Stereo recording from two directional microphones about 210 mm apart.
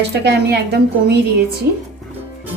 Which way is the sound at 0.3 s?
50° right (ahead or behind).